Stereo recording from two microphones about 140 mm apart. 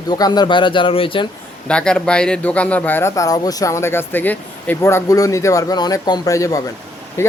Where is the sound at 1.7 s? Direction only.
5° left (ahead or behind).